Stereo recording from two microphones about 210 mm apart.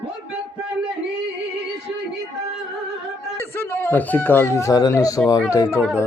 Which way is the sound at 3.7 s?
10° left (ahead or behind).